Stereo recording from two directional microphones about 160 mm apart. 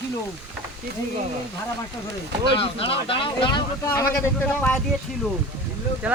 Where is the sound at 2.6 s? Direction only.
35° left (ahead or behind).